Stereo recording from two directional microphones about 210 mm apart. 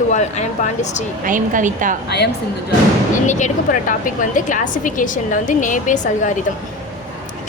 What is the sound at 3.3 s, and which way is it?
A woman's voice, 35° left (ahead or behind).